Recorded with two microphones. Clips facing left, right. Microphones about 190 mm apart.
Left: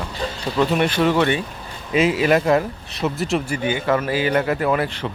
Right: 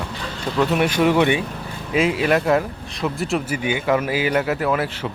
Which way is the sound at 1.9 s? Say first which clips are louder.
Left 1 dB; centre (ahead or behind).